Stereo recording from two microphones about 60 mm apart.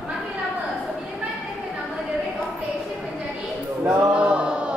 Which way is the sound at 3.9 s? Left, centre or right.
Centre.